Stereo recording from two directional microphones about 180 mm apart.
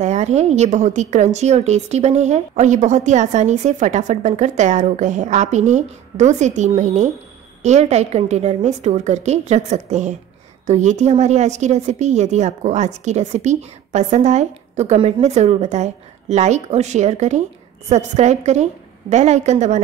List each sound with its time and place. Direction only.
0.0 s speech: 40° right (ahead or behind)